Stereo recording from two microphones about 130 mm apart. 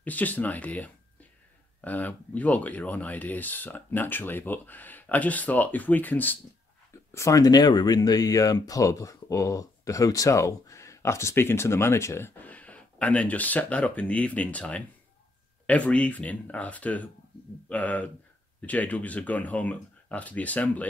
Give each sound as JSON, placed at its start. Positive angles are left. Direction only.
{"t": 0.0, "sound": "speech", "side_deg": 10}